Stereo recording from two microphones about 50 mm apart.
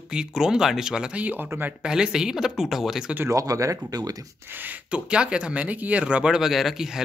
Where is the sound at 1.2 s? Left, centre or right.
Right.